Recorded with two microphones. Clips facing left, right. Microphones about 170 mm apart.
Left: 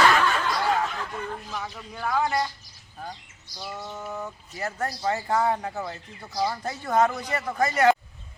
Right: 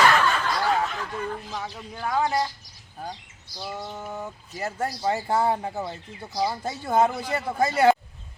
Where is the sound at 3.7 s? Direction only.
20° right (ahead or behind).